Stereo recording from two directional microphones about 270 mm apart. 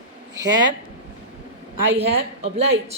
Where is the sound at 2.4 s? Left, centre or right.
Right.